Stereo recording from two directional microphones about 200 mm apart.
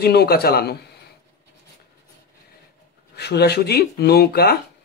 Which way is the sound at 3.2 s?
55° left (ahead or behind).